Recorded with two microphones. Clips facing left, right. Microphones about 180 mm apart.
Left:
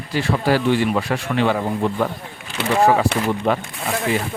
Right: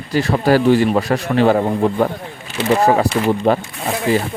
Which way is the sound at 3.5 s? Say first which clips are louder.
Right 4 dB; 35° right (ahead or behind).